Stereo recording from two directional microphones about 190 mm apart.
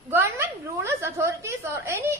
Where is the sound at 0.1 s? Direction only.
15° right (ahead or behind).